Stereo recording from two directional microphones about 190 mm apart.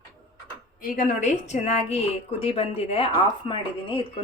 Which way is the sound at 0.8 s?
45° left (ahead or behind).